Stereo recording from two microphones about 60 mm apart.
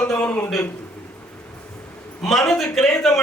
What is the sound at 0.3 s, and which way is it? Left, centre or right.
Speech, left.